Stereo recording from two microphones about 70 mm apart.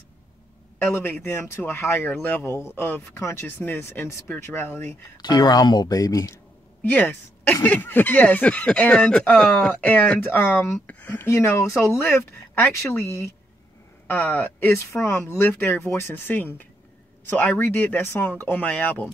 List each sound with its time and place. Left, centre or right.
0.9 s speech: left
5.1 s speech: left
5.9 s speech: left
6.8 s speech: left
10.3 s speech: left
10.9 s speech: left
11.2 s speech: left
12.0 s speech: left
16.3 s speech: left